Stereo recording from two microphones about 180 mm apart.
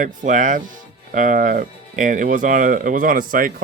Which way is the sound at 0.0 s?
45° right (ahead or behind).